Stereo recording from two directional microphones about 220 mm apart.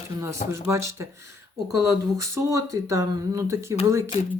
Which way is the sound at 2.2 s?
15° right (ahead or behind).